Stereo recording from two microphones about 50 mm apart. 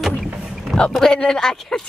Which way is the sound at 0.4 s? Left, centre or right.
Centre.